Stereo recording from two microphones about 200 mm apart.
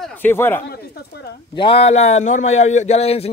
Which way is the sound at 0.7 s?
50° left (ahead or behind).